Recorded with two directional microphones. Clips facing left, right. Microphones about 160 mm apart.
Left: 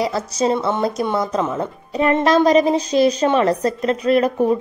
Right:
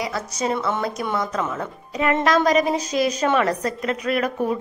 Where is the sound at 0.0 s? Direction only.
30° left (ahead or behind).